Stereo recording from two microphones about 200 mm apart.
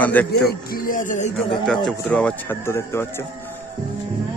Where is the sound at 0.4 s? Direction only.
45° left (ahead or behind).